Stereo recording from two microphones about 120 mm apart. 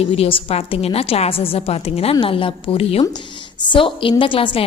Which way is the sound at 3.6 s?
40° left (ahead or behind).